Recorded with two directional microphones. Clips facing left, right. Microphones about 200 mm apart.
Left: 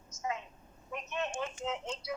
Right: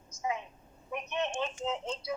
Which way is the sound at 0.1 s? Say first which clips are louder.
Right 3 dB; 15° right (ahead or behind).